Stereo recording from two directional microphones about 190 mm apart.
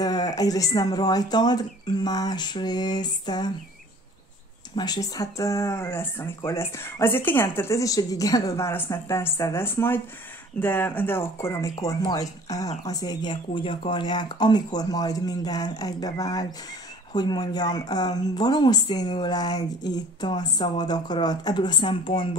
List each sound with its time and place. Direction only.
0.0 s speech: 20° left (ahead or behind)
4.7 s speech: 20° left (ahead or behind)